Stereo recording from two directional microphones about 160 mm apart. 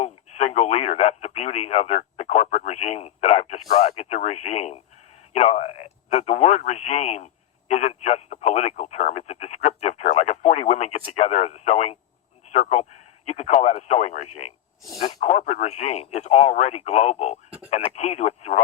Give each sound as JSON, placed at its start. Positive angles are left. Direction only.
{"t": 0.0, "sound": "speech", "side_deg": 45}